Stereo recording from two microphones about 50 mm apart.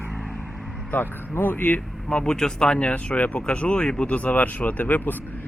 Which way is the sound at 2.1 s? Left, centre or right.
Centre.